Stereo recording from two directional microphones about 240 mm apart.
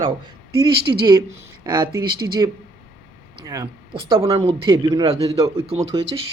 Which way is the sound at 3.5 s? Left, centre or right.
Centre.